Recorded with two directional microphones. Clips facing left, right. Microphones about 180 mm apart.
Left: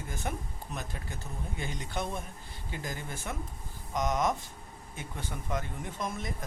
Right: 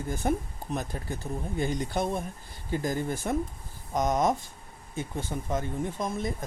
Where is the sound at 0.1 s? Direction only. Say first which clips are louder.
Right 10 dB; 35° right (ahead or behind).